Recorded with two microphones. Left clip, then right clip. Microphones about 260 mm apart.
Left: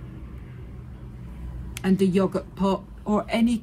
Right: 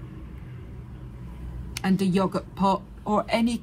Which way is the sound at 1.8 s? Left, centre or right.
Right.